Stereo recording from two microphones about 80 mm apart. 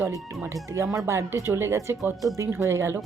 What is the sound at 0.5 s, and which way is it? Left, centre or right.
A woman's voice, right.